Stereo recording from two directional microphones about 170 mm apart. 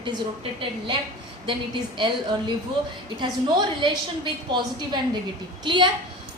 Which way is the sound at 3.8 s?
30° right (ahead or behind).